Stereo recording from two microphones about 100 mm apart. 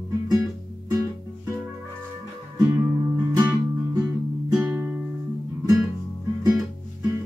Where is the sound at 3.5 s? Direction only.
15° right (ahead or behind).